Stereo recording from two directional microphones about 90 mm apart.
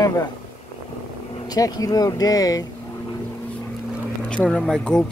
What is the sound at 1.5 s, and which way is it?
Speech, 45° left (ahead or behind).